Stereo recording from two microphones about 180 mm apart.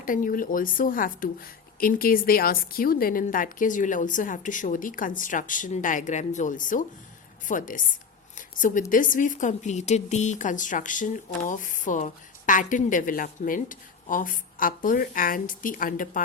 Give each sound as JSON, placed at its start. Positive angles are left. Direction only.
{"t": 0.0, "sound": "a woman's voice", "side_deg": 50}
{"t": 8.4, "sound": "a sound", "side_deg": 45}
{"t": 8.9, "sound": "a woman's voice", "side_deg": 50}